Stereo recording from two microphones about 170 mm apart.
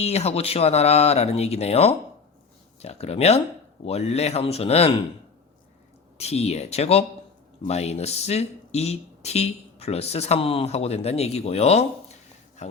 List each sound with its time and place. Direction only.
0.0 s speech: 35° left (ahead or behind)
6.1 s speech: 40° left (ahead or behind)